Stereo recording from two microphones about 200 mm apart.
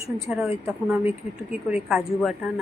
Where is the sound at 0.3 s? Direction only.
5° right (ahead or behind).